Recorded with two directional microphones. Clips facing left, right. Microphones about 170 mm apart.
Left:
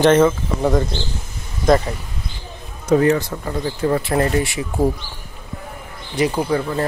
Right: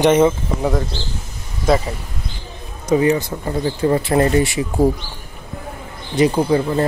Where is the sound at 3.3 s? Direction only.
20° right (ahead or behind).